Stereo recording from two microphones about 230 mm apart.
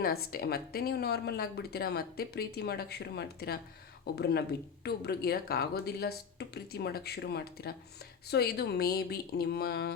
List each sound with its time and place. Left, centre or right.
0.0 s speech: left